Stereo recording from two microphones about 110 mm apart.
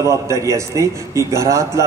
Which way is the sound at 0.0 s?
30° right (ahead or behind).